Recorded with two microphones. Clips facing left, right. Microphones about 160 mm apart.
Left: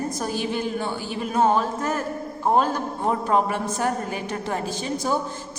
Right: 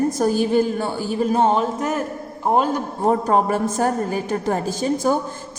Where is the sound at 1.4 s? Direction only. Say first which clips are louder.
Right 2 dB; 20° right (ahead or behind).